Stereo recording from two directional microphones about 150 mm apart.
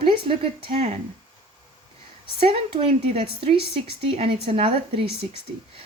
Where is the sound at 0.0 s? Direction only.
40° right (ahead or behind).